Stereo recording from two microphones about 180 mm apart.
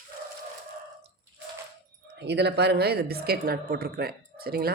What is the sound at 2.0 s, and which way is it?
A woman's voice, 70° right (ahead or behind).